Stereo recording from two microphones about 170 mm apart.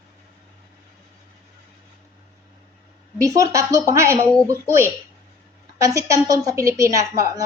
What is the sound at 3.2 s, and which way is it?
A woman's voice, 20° right (ahead or behind).